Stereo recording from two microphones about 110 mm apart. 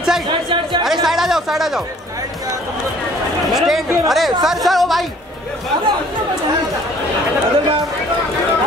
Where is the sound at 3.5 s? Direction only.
Centre (ahead or behind).